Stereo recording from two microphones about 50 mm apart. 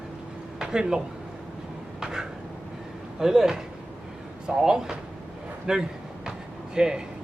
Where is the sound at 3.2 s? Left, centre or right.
Centre.